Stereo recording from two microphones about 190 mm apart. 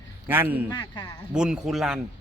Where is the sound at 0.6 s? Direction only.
20° left (ahead or behind).